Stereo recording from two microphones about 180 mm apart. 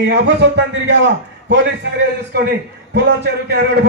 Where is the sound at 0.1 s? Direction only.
75° right (ahead or behind).